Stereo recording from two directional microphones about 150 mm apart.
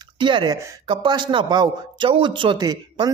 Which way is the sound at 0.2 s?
35° right (ahead or behind).